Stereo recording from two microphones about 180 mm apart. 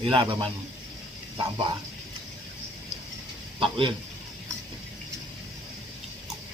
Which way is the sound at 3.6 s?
25° right (ahead or behind).